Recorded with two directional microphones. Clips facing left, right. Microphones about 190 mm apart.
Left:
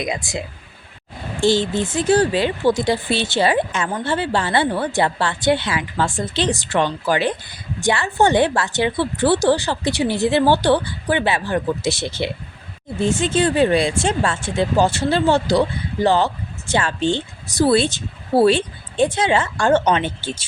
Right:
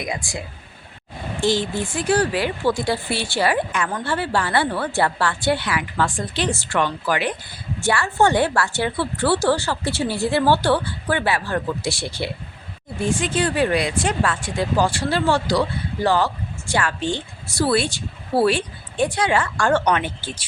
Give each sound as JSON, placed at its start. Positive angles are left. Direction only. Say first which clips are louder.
{"t": 0.0, "sound": "a woman's voice", "louder": "left 3 dB", "side_deg": 20}